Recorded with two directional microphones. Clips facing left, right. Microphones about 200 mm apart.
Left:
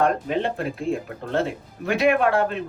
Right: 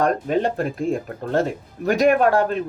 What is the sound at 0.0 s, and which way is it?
Speech, 45° right (ahead or behind).